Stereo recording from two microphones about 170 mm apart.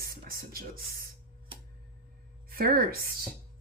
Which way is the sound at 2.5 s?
60° right (ahead or behind).